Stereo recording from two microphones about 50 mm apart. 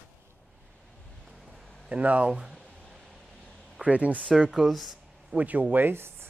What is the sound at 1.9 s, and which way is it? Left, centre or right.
Speech, right.